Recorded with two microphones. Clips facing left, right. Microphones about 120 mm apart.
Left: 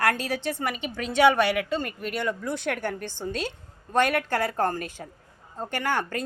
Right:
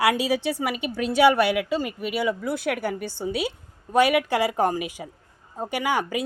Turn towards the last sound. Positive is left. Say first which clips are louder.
# right 3 dB
turn(degrees=-10)  # may be behind; listen again after turning